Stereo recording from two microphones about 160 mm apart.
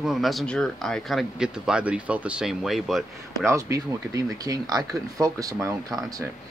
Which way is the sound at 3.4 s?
20° right (ahead or behind).